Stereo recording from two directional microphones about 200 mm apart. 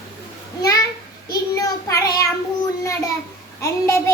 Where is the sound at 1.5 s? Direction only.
15° left (ahead or behind).